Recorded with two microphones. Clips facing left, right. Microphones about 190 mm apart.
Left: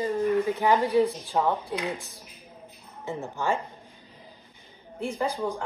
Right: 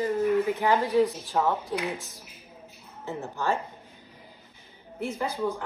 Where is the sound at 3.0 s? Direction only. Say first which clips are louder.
Left 1 dB; 15° left (ahead or behind).